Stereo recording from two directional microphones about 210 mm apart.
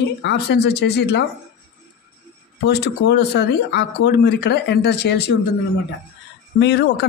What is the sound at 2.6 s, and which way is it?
Speech, 50° left (ahead or behind).